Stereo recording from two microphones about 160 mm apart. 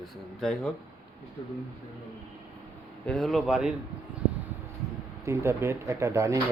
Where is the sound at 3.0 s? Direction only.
Centre (ahead or behind).